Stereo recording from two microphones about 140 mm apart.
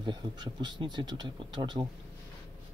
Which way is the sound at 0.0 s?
30° right (ahead or behind).